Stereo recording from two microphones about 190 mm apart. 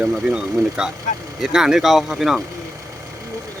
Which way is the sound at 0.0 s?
5° right (ahead or behind).